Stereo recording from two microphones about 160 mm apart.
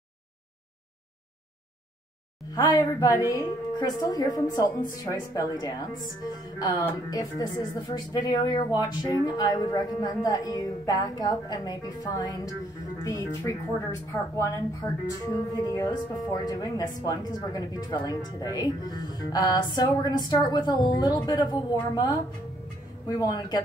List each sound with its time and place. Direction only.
2.5 s speech: 25° left (ahead or behind)
13.5 s speech: 20° left (ahead or behind)